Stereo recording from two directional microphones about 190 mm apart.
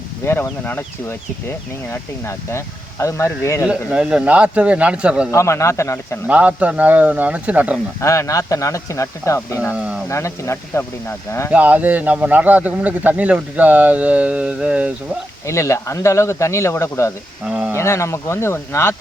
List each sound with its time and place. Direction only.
0.3 s speech: 10° left (ahead or behind)
3.7 s a man's voice: 5° right (ahead or behind)
5.3 s speech: 15° left (ahead or behind)
6.2 s speech: 10° right (ahead or behind)
8.0 s speech: 15° left (ahead or behind)
9.7 s speech: 5° right (ahead or behind)
10.1 s speech: 15° left (ahead or behind)
11.5 s speech: 10° right (ahead or behind)
15.4 s speech: 15° left (ahead or behind)
17.4 s a man's voice: 5° right (ahead or behind)
17.7 s speech: 15° left (ahead or behind)